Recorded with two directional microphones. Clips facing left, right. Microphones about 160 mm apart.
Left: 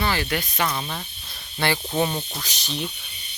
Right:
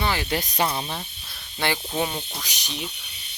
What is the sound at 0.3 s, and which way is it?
Speech, 35° right (ahead or behind).